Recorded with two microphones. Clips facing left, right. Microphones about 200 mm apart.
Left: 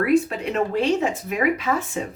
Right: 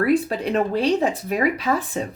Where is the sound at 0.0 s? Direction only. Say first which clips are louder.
Even; 35° right (ahead or behind).